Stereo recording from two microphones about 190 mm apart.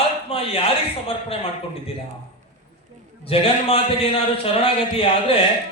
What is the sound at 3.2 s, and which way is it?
A man's voice, 30° left (ahead or behind).